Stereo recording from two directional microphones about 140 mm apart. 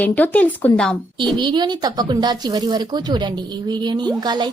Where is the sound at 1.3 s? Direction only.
35° right (ahead or behind).